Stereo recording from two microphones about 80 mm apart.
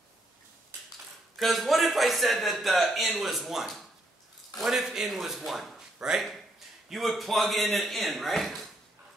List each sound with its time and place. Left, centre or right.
1.3 s a man's voice: centre